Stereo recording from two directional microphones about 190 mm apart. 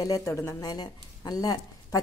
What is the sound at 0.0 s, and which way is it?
A woman's voice, 15° left (ahead or behind).